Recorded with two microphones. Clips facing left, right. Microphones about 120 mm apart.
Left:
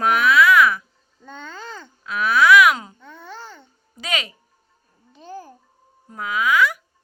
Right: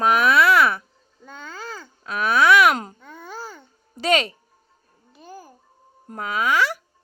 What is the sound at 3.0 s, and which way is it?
Babbling, 10° right (ahead or behind).